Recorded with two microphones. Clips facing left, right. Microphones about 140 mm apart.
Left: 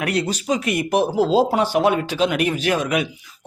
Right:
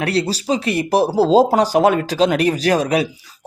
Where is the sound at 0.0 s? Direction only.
30° right (ahead or behind).